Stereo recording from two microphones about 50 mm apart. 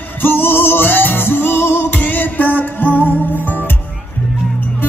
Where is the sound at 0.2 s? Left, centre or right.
Left.